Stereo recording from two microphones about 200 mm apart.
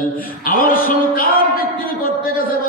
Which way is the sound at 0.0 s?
45° left (ahead or behind).